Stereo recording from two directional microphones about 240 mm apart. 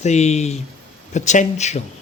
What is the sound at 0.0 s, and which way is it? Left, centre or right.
Speech, left.